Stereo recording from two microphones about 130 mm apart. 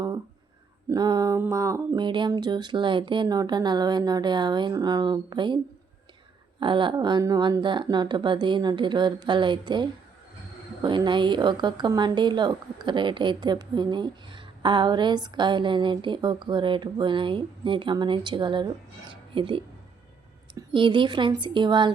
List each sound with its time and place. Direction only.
0.9 s a woman's voice: 30° right (ahead or behind)
1.4 s a sound: 25° right (ahead or behind)
2.0 s a woman's voice: 35° right (ahead or behind)
6.6 s a woman's voice: 40° right (ahead or behind)
20.7 s a woman's voice: 40° right (ahead or behind)